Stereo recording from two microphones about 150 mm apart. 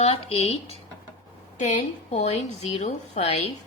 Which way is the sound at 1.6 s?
50° left (ahead or behind).